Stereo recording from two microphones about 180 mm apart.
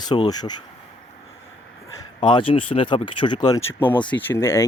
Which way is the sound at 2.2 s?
25° left (ahead or behind).